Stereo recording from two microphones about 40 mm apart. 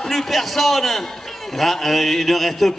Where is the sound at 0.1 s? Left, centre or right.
Centre.